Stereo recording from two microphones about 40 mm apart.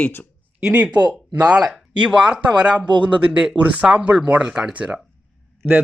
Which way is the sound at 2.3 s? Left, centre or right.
Right.